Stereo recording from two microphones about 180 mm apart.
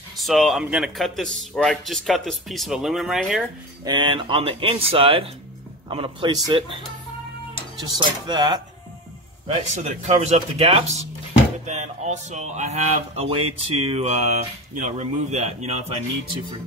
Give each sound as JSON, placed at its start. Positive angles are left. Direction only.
{"t": 0.2, "sound": "speech", "side_deg": 0}
{"t": 3.8, "sound": "speech", "side_deg": -25}
{"t": 7.8, "sound": "speech", "side_deg": -20}
{"t": 9.5, "sound": "speech", "side_deg": -35}